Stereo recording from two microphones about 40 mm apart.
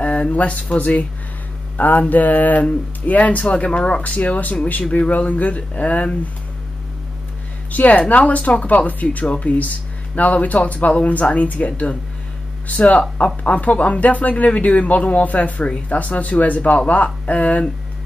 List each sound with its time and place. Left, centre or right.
0.0 s speech: left
1.8 s mantra: left
3.1 s speech: left
7.7 s speech: left